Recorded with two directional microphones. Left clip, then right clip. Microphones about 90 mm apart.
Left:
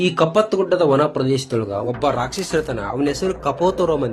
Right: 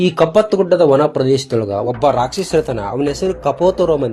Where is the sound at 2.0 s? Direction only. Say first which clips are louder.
Right 7 dB; 35° right (ahead or behind).